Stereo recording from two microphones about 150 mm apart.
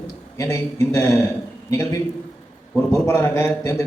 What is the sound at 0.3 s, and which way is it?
A man's voice, 20° left (ahead or behind).